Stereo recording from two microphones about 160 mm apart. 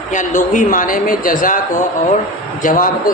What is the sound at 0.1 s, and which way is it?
A man's voice, 50° left (ahead or behind).